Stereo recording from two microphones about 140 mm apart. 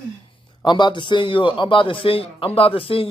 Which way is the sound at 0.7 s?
35° left (ahead or behind).